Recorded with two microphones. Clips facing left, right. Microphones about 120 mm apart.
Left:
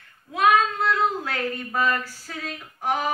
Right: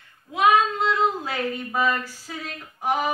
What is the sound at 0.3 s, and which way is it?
Child singing, 10° right (ahead or behind).